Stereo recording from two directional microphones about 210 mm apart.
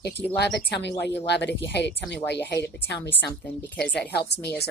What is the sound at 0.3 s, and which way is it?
Speech, 55° left (ahead or behind).